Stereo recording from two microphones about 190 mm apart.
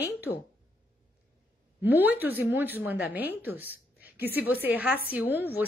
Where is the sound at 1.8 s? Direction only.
10° right (ahead or behind).